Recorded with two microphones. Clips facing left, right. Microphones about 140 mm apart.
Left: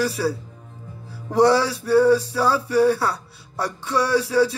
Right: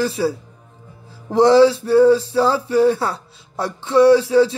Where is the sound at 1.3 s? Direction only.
20° right (ahead or behind).